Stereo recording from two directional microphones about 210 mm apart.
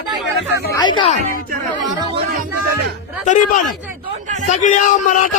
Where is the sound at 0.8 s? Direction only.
20° left (ahead or behind).